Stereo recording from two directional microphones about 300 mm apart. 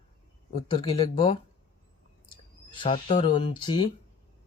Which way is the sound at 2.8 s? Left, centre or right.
Centre.